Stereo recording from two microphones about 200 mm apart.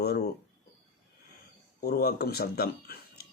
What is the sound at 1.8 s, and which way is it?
Speech, 50° left (ahead or behind).